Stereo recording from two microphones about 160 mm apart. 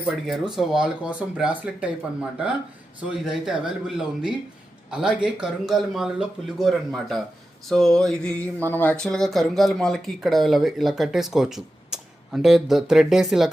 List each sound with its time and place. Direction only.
0.0 s speech: 5° right (ahead or behind)
3.0 s speech: 5° right (ahead or behind)